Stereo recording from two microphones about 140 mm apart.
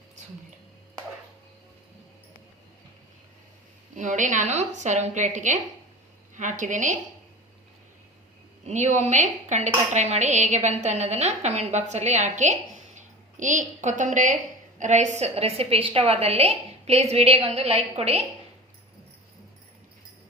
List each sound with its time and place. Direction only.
3.9 s speech: 65° right (ahead or behind)
8.6 s speech: 55° right (ahead or behind)